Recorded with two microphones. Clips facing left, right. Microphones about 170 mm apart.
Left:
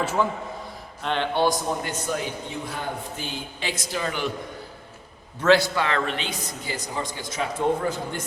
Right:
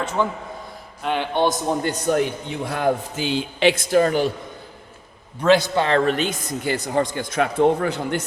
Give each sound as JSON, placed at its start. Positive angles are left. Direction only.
{"t": 0.0, "sound": "a man's voice", "side_deg": 5}
{"t": 1.0, "sound": "a man's voice", "side_deg": -10}
{"t": 2.0, "sound": "a man's voice", "side_deg": -65}
{"t": 3.9, "sound": "a man's voice", "side_deg": -45}
{"t": 5.4, "sound": "a man's voice", "side_deg": -20}
{"t": 5.8, "sound": "a man's voice", "side_deg": -40}